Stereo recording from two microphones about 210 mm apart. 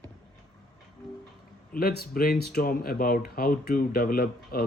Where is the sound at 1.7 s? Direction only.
50° left (ahead or behind).